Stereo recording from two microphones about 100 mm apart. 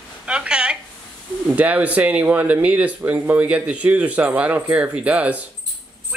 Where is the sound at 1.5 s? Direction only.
15° right (ahead or behind).